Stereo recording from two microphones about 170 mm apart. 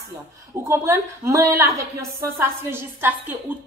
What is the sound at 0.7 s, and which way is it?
A woman's voice, 15° right (ahead or behind).